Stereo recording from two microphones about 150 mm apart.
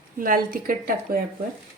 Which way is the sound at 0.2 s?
65° right (ahead or behind).